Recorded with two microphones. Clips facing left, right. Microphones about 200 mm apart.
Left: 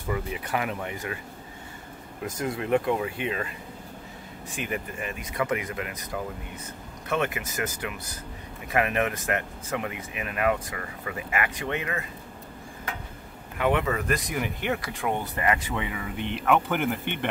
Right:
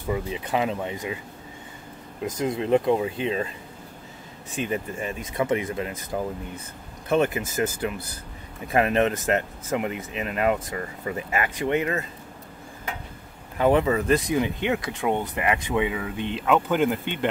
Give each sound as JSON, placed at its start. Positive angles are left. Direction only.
{"t": 0.1, "sound": "speech", "side_deg": -20}
{"t": 2.2, "sound": "speech", "side_deg": -20}
{"t": 4.6, "sound": "speech", "side_deg": -25}
{"t": 13.6, "sound": "speech", "side_deg": -35}